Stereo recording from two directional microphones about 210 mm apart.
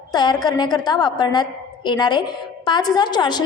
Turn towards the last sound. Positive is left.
turn(degrees=20)  # may be behind; listen again after turning